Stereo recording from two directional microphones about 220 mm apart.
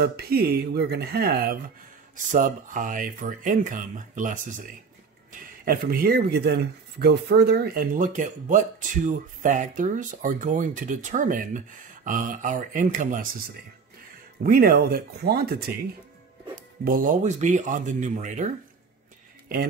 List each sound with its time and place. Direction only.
0.0 s speech: 45° right (ahead or behind)
14.4 s speech: 40° right (ahead or behind)
16.8 s speech: 40° right (ahead or behind)